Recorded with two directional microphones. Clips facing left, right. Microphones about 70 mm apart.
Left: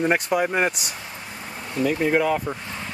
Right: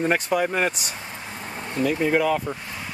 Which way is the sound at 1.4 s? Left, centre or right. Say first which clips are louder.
Right 2 dB; centre.